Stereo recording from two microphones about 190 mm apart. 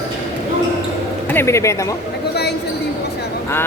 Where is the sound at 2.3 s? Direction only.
60° left (ahead or behind).